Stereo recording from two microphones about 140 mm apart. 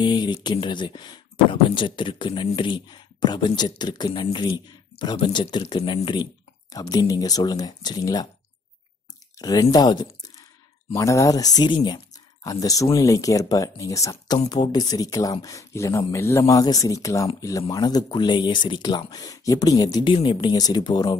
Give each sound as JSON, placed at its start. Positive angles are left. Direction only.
{"t": 0.0, "sound": "speech", "side_deg": 30}
{"t": 9.4, "sound": "speech", "side_deg": 25}